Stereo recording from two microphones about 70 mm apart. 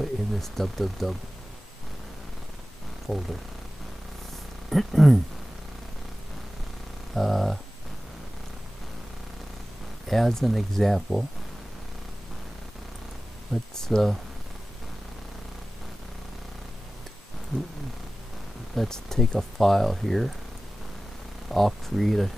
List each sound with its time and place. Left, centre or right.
0.0 s speech: centre
3.1 s speech: centre
4.6 s speech: centre
7.2 s speech: centre
10.0 s speech: centre
13.7 s speech: centre
18.8 s speech: centre
21.5 s speech: centre